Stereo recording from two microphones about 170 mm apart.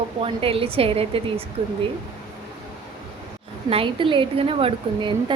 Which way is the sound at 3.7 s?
30° right (ahead or behind).